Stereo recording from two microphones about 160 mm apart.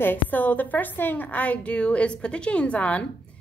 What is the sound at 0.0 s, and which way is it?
A woman's voice, 10° left (ahead or behind).